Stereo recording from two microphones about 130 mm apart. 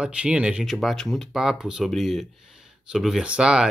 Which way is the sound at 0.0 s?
10° right (ahead or behind).